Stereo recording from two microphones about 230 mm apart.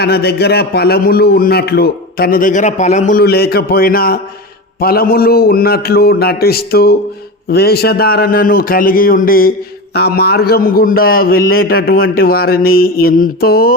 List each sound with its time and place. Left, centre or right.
0.0 s a man's voice: left